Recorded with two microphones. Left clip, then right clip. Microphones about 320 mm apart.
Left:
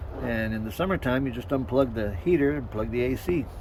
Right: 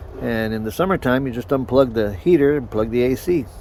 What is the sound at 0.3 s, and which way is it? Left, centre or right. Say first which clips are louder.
Speech: right 7 dB; centre.